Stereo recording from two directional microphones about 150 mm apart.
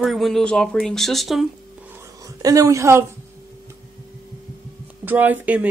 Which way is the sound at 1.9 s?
20° right (ahead or behind).